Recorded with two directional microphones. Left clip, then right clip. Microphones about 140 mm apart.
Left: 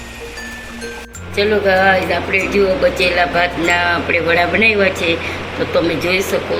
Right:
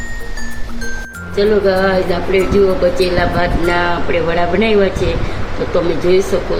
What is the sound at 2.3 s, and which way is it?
Speech, 90° right.